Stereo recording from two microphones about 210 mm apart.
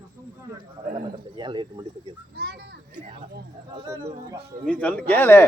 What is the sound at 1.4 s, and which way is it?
Speech, 20° right (ahead or behind).